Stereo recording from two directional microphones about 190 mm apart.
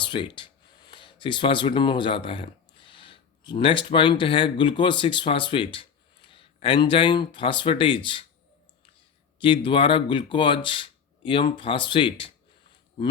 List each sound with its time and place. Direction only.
0.0 s speech: 25° left (ahead or behind)
9.4 s speech: 25° left (ahead or behind)